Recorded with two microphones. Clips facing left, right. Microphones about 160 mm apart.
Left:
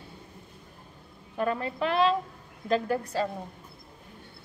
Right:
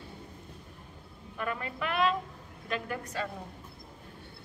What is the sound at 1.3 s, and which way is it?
A woman's voice, 35° left (ahead or behind).